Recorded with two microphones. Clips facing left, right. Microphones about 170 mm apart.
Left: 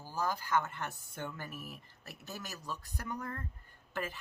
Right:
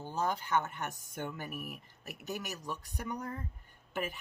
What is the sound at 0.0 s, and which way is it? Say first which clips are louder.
Speech: right 2 dB; 25° right (ahead or behind).